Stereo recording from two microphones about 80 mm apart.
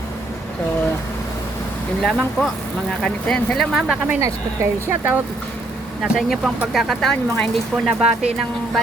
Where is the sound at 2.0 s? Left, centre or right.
Centre.